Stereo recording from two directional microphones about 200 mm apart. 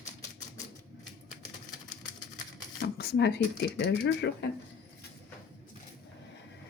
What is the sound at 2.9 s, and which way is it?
Speech, 55° left (ahead or behind).